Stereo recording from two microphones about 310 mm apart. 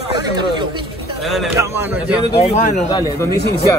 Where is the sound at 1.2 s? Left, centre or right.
Centre.